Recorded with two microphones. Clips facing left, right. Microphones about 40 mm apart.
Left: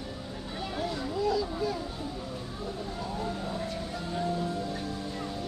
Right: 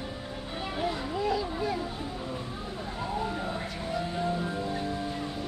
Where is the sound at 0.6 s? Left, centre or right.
Right.